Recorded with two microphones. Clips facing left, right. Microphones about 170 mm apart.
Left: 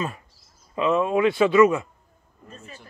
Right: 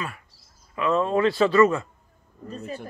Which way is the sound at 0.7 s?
15° left (ahead or behind).